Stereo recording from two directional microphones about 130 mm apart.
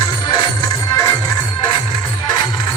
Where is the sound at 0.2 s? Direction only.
30° left (ahead or behind).